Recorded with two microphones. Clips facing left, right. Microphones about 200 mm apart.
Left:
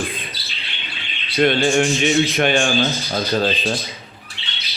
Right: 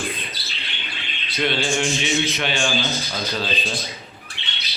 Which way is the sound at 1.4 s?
50° left (ahead or behind).